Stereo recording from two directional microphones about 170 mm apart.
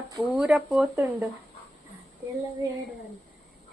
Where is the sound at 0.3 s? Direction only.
5° right (ahead or behind).